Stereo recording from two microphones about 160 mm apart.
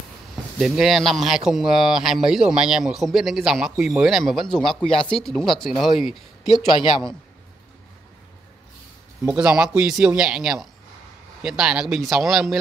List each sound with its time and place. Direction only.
0.6 s a man's voice: centre (ahead or behind)
6.5 s a man's voice: 30° left (ahead or behind)
9.2 s a man's voice: 5° right (ahead or behind)